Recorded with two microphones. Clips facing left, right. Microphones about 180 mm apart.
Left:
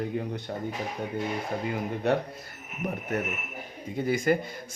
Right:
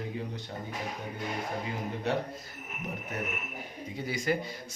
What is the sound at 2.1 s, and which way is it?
Speech, 55° left (ahead or behind).